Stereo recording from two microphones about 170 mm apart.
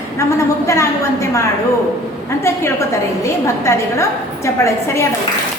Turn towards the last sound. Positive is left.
turn(degrees=15)  # may be behind; listen again after turning